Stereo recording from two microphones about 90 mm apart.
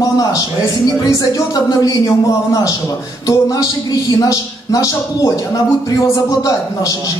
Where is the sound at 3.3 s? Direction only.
40° left (ahead or behind).